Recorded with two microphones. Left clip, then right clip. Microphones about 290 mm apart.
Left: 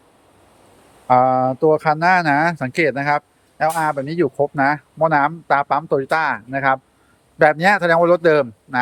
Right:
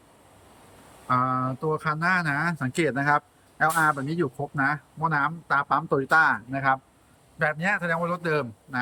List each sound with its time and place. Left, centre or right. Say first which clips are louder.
1.0 s speech: left 10 dB; centre